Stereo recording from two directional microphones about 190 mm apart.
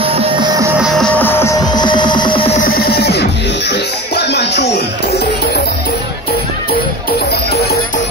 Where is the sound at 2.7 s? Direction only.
55° left (ahead or behind).